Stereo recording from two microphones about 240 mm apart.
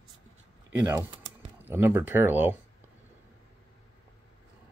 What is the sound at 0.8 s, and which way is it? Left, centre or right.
Typing, centre.